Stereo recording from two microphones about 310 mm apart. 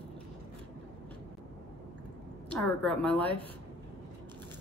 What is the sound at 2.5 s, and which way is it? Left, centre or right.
Speech, centre.